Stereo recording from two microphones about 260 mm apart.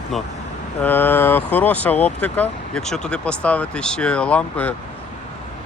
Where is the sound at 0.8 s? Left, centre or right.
Centre.